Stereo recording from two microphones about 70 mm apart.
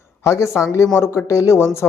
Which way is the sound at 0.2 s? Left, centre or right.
Left.